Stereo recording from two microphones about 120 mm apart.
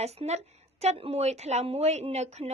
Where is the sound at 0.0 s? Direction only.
65° right (ahead or behind).